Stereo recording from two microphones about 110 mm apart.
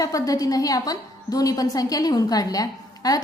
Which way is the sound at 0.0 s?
35° left (ahead or behind).